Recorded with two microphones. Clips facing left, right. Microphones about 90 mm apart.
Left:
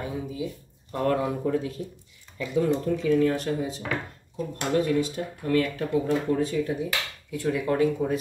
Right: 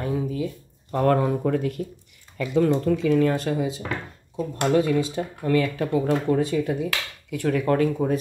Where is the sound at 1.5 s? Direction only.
70° right (ahead or behind).